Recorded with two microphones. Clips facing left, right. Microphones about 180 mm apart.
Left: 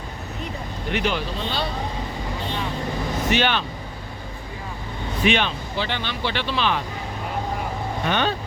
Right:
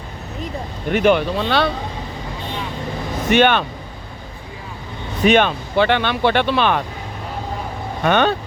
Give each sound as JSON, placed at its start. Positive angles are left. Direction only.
{"t": 0.9, "sound": "speech", "side_deg": -50}
{"t": 3.2, "sound": "speech", "side_deg": -55}
{"t": 5.2, "sound": "speech", "side_deg": -50}
{"t": 8.0, "sound": "speech", "side_deg": -60}